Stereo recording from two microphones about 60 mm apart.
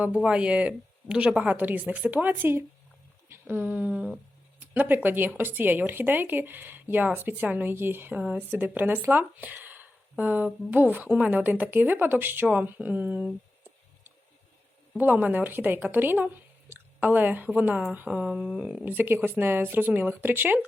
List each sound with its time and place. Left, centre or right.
0.0 s speech: centre
1.5 s speech: right
15.0 s speech: right
18.3 s speech: centre
18.9 s speech: right